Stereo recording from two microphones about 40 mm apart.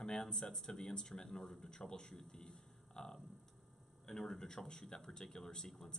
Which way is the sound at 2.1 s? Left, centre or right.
Centre.